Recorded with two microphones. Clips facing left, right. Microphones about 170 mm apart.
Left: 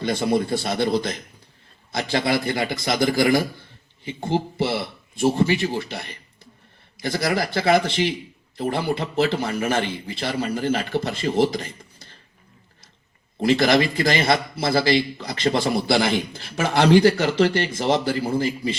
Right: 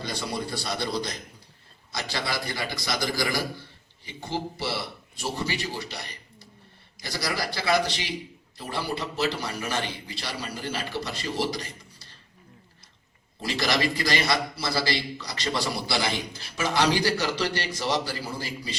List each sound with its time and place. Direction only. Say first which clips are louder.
0.0 s speech: left 10 dB; 55° left (ahead or behind)
1.9 s speech: left 9 dB; 55° left (ahead or behind)
13.5 s speech: left 8 dB; 55° left (ahead or behind)